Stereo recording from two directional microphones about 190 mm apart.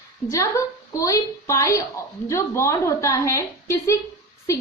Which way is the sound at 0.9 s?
15° left (ahead or behind).